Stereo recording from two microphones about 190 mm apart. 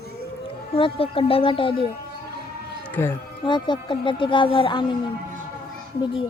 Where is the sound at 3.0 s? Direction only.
10° left (ahead or behind).